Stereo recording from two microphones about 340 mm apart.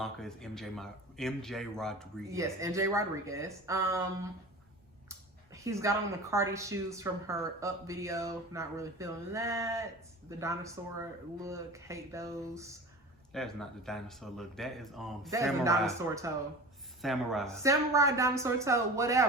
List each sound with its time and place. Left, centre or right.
0.0 s speech: centre
2.2 s a woman's voice: centre
5.5 s a woman's voice: centre
13.3 s a woman's voice: centre